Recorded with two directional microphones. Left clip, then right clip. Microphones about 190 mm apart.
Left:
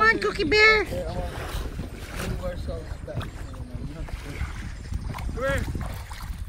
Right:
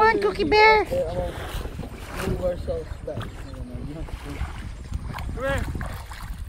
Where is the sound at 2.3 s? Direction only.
50° right (ahead or behind).